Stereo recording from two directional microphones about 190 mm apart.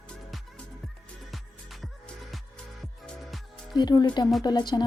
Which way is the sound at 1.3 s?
Centre (ahead or behind).